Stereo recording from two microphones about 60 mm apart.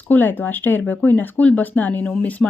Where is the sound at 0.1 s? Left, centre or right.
Left.